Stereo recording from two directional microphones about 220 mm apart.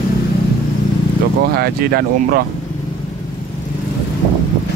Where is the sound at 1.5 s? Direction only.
45° right (ahead or behind).